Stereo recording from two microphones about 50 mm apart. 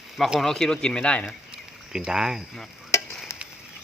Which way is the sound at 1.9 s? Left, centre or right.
Centre.